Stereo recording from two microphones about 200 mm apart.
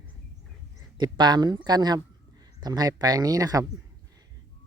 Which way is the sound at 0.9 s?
20° right (ahead or behind).